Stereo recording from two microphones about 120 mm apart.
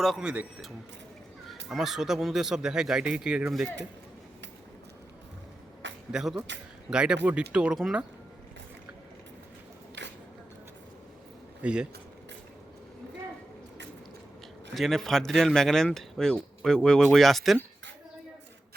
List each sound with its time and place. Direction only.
0.0 s speech: 5° right (ahead or behind)
6.1 s speech: 5° right (ahead or behind)
11.6 s speech: 10° right (ahead or behind)
14.7 s speech: centre (ahead or behind)